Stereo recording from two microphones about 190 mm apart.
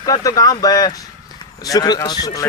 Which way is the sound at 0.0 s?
20° left (ahead or behind).